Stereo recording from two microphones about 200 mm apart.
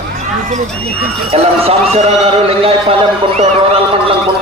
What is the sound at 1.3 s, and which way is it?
A man's voice, 30° right (ahead or behind).